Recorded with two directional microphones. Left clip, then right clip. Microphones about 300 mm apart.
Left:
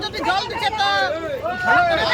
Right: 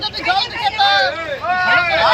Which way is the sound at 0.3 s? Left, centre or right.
Centre.